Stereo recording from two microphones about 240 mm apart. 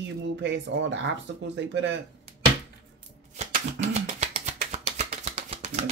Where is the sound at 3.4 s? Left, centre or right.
Right.